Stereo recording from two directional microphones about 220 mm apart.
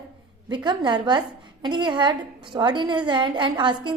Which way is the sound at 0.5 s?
20° right (ahead or behind).